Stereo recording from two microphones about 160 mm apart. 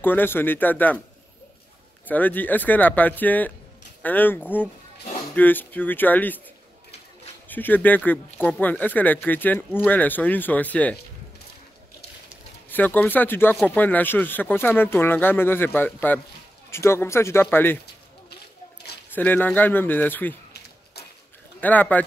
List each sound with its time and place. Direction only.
0.0 s speech: 10° left (ahead or behind)
2.0 s speech: 10° left (ahead or behind)
7.4 s speech: 10° left (ahead or behind)
12.6 s speech: 10° left (ahead or behind)
18.3 s a sound: 90° left
19.1 s speech: 10° left (ahead or behind)
21.5 s speech: 10° left (ahead or behind)